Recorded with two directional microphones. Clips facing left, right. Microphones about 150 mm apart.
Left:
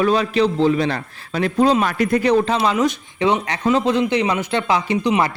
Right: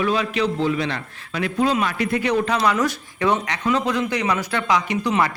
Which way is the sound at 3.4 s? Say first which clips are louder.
Left 4 dB; 30° left (ahead or behind).